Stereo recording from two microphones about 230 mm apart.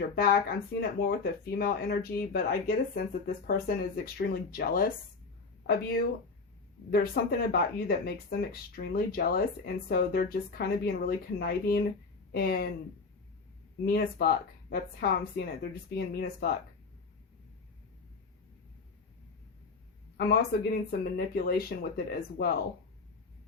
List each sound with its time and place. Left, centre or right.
0.2 s speech: left
13.8 s speech: left
20.1 s speech: left